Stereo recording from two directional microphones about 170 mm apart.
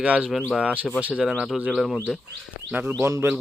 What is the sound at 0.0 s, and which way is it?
Speech, 5° right (ahead or behind).